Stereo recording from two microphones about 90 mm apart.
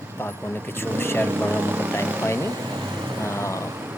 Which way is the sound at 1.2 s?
20° right (ahead or behind).